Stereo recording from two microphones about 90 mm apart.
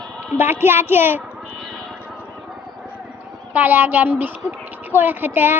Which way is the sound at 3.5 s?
20° right (ahead or behind).